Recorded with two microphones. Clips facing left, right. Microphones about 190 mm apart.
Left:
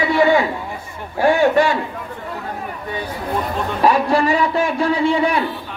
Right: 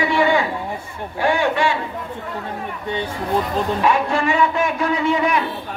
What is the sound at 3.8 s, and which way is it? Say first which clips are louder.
A man's voice: left 6 dB; 35° left (ahead or behind).